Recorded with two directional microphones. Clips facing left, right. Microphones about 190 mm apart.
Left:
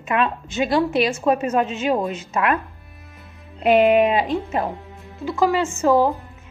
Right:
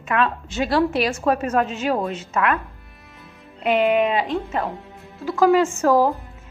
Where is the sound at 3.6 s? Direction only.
15° left (ahead or behind).